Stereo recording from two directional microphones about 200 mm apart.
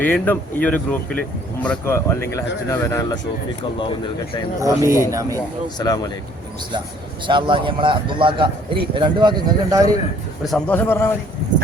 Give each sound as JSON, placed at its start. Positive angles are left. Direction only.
{"t": 0.0, "sound": "speech", "side_deg": 10}
{"t": 4.6, "sound": "speech", "side_deg": -15}
{"t": 5.6, "sound": "speech", "side_deg": 20}
{"t": 7.3, "sound": "a man's voice", "side_deg": -25}
{"t": 10.4, "sound": "speech", "side_deg": 5}